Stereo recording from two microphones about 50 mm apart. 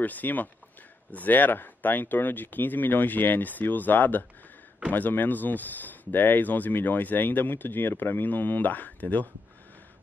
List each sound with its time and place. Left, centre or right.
0.0 s speech: left